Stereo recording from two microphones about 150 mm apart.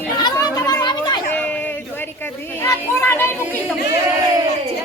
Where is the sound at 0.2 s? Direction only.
25° left (ahead or behind).